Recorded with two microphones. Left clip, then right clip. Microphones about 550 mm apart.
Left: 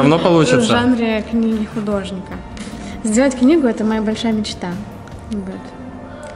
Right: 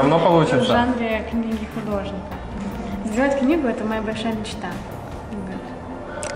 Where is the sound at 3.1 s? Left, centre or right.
Left.